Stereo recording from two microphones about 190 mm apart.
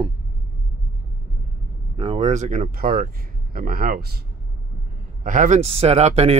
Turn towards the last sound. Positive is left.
turn(degrees=-35)  # may be behind; listen again after turning